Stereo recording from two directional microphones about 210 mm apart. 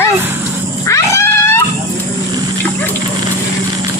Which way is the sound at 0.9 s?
15° left (ahead or behind).